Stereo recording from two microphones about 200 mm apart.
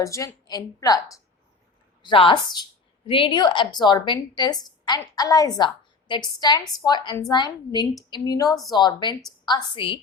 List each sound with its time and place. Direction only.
0.0 s a woman's voice: 15° left (ahead or behind)